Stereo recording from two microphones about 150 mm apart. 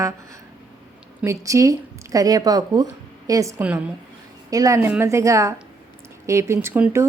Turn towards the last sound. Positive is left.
turn(degrees=-15)  # may be behind; listen again after turning